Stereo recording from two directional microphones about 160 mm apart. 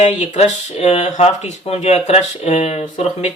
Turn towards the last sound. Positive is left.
turn(degrees=45)  # may be behind; listen again after turning